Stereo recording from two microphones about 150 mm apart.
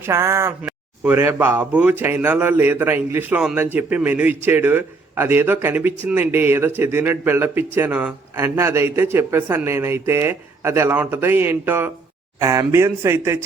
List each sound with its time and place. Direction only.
0.0 s speech: 20° right (ahead or behind)